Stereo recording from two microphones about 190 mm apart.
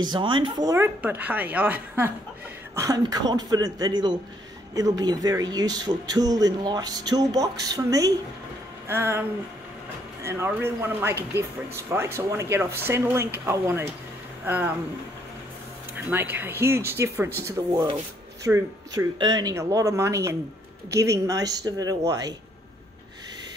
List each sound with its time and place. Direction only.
0.0 s speech: 25° right (ahead or behind)
8.8 s a sound: 15° right (ahead or behind)
10.2 s speech: 15° right (ahead or behind)
16.1 s speech: 10° right (ahead or behind)